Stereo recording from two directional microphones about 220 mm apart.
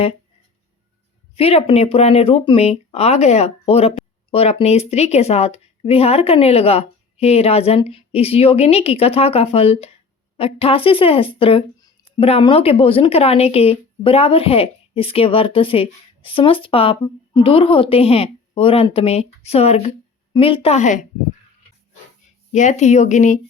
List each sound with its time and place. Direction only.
1.4 s speech: 25° left (ahead or behind)
22.5 s speech: 35° left (ahead or behind)